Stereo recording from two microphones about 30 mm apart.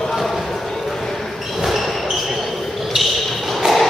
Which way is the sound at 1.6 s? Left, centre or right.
Centre.